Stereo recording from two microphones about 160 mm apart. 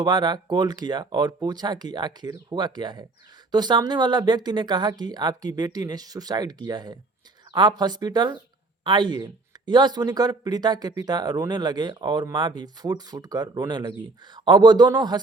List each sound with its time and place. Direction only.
0.0 s speech: 25° right (ahead or behind)